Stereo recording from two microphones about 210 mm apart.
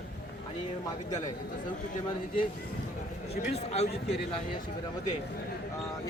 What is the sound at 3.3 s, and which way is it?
Speech, 50° left (ahead or behind).